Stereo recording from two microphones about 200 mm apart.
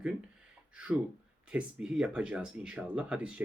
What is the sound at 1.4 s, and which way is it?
Speech, 5° right (ahead or behind).